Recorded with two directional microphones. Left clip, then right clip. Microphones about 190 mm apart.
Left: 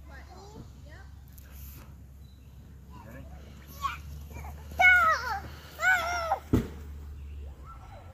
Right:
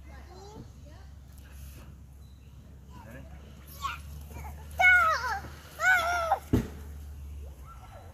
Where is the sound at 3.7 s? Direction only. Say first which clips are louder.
Left 2 dB; 10° right (ahead or behind); by 6.6 s 10° left (ahead or behind).